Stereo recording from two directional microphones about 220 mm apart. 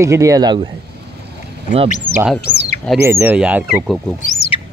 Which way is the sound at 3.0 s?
10° right (ahead or behind).